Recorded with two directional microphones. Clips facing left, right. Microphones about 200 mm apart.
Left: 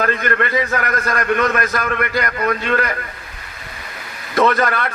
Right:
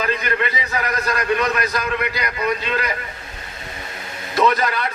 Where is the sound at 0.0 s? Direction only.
55° left (ahead or behind).